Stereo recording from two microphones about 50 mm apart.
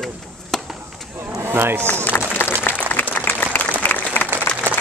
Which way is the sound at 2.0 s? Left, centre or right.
Left.